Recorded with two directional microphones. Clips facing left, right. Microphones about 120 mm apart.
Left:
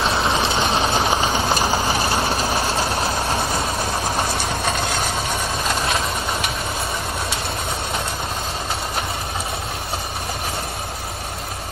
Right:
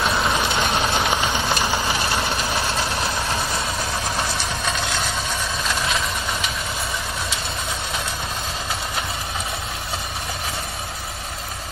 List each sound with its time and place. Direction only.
0.0 s a sound: 25° left (ahead or behind)
1.9 s vehicle: 35° left (ahead or behind)
4.4 s vehicle: 50° left (ahead or behind)